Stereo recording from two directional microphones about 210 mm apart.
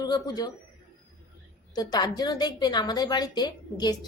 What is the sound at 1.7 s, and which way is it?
A woman's voice, 20° left (ahead or behind).